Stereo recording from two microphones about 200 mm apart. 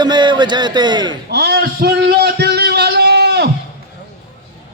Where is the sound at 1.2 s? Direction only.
55° right (ahead or behind).